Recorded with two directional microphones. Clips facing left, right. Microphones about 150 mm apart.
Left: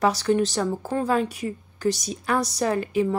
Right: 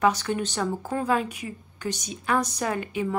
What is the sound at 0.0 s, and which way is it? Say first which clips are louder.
Speech: left 3 dB; 35° left (ahead or behind).